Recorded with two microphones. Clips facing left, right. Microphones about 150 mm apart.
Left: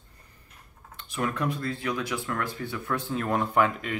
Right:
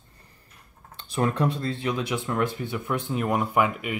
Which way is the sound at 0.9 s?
35° right (ahead or behind).